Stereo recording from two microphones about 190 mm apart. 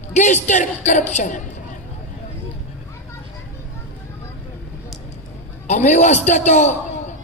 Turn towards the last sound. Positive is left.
turn(degrees=40)  # may be behind; listen again after turning